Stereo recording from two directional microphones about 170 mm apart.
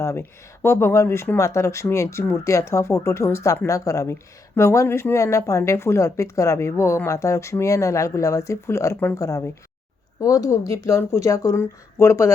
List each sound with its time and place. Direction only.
0.0 s speech: 15° left (ahead or behind)